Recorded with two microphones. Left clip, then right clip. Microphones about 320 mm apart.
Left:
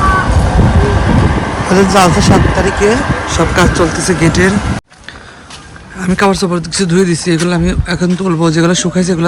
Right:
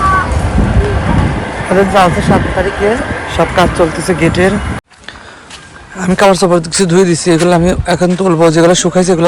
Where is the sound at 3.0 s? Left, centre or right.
Left.